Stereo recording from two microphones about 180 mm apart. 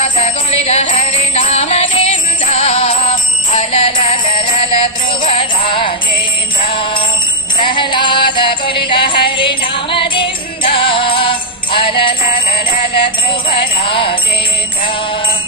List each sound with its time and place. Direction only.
0.0 s music: 35° left (ahead or behind)
6.7 s jingle bell: 30° left (ahead or behind)
7.6 s music: 25° left (ahead or behind)
13.5 s music: 30° left (ahead or behind)